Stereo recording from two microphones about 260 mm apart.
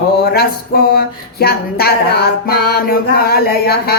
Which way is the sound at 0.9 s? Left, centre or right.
Left.